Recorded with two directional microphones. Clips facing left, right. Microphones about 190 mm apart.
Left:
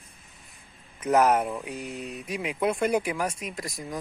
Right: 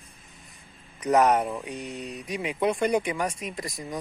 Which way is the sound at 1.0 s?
Centre (ahead or behind).